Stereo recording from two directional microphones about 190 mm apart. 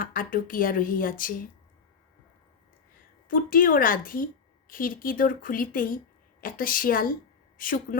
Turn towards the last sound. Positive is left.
turn(degrees=45)  # may be behind; listen again after turning